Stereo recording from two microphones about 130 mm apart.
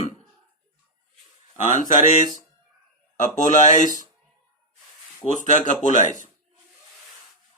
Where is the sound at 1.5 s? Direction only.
75° left (ahead or behind).